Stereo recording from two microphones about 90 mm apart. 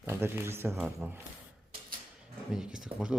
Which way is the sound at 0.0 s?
25° right (ahead or behind).